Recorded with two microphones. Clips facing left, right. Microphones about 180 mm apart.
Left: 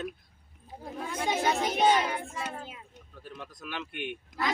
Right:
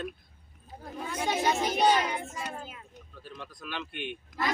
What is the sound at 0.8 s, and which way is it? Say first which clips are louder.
Speech: even; centre (ahead or behind).